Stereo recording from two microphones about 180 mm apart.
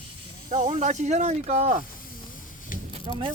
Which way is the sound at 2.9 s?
30° right (ahead or behind).